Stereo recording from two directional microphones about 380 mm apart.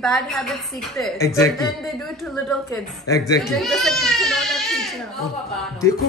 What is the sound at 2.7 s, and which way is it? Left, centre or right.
Speech, centre.